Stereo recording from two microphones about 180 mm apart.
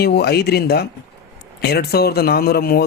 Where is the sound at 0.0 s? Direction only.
65° left (ahead or behind).